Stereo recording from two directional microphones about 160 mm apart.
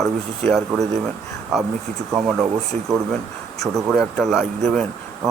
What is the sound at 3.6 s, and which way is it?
Speech, centre (ahead or behind).